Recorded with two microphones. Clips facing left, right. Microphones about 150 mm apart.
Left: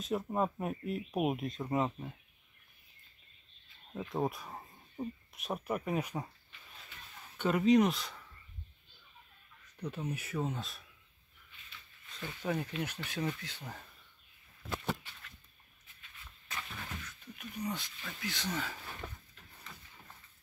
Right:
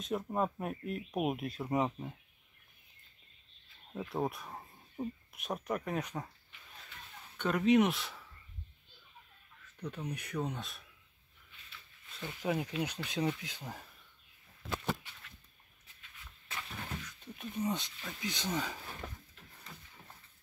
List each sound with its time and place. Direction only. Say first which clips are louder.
0.0 s speech: left 1 dB; centre (ahead or behind)
3.9 s speech: left 1 dB; centre (ahead or behind)
7.3 s speech: left 1 dB; 5° left (ahead or behind)
9.8 s speech: left 2 dB; 10° left (ahead or behind)
12.2 s speech: right 1 dB; 10° right (ahead or behind)
16.7 s speech: right 2 dB; 20° right (ahead or behind)